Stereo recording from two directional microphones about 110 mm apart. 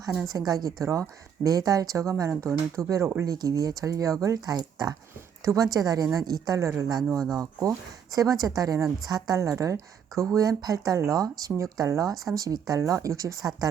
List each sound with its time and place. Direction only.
0.3 s speech: 35° right (ahead or behind)